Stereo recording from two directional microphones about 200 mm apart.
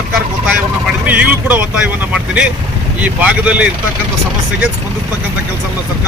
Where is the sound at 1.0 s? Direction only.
10° right (ahead or behind).